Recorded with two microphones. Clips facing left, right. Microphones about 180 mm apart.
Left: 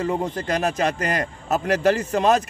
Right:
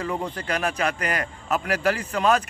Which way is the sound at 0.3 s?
40° left (ahead or behind).